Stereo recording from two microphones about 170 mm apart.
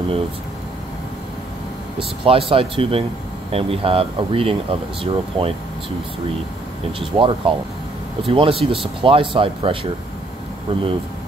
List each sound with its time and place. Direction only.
2.0 s speech: 35° right (ahead or behind)
7.0 s speech: 30° right (ahead or behind)